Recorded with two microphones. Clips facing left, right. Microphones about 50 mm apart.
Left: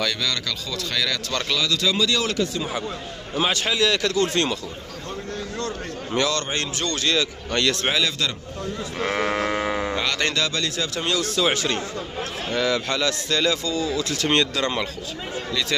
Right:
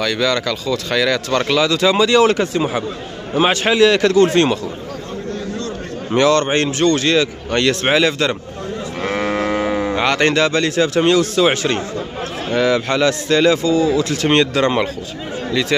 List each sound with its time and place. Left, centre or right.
0.0 s speech: right
6.1 s speech: right
9.0 s sheep: centre
9.9 s speech: right